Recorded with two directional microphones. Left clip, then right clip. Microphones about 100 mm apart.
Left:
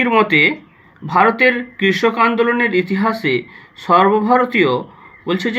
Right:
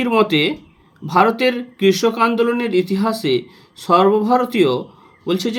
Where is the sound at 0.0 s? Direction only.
30° right (ahead or behind).